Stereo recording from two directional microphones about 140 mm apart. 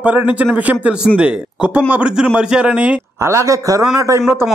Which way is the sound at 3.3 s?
20° right (ahead or behind).